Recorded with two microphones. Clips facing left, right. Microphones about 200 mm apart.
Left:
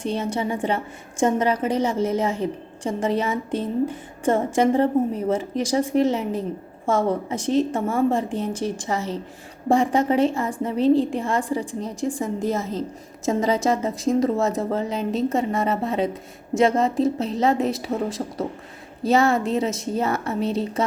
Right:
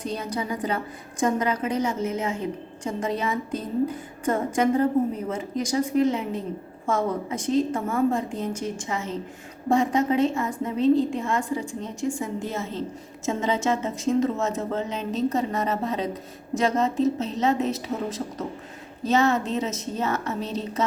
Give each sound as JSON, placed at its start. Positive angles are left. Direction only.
{"t": 0.0, "sound": "a woman's voice", "side_deg": 30}